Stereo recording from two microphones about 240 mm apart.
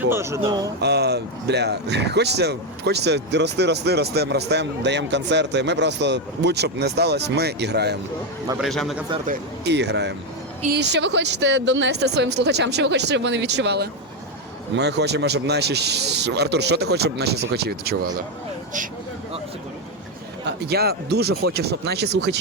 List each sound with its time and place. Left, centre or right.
0.1 s speech: centre
0.8 s speech: right
8.5 s a man's voice: centre
9.2 s speech: right
20.4 s speech: right